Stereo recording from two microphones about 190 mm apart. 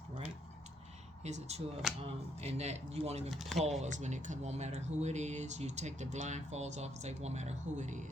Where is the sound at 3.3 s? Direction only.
Centre (ahead or behind).